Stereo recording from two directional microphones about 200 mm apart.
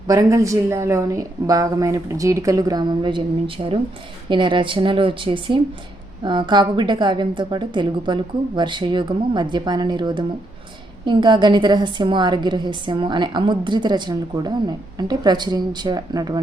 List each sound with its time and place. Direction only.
0.1 s a woman's voice: 15° right (ahead or behind)